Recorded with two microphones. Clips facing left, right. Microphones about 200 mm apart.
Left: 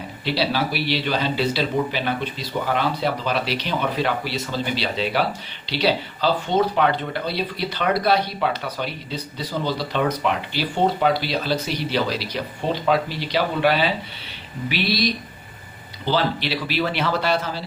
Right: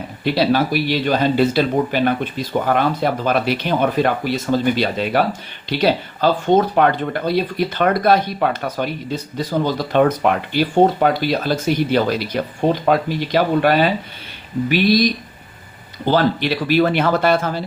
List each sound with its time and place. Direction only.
0.3 s speech: 50° right (ahead or behind)